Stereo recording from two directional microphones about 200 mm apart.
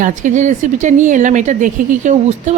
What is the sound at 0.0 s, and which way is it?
A woman's voice, 40° right (ahead or behind).